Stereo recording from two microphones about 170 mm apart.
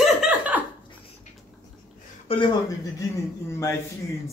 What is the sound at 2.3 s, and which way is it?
Speech, 35° left (ahead or behind).